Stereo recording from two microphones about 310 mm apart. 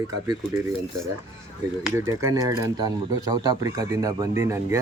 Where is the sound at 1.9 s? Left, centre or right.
Centre.